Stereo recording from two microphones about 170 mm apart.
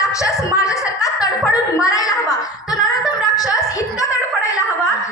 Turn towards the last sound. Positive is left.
turn(degrees=20)  # may be behind; listen again after turning